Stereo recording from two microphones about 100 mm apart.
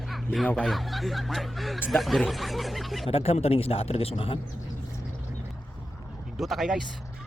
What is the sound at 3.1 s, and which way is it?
Speech, 80° left.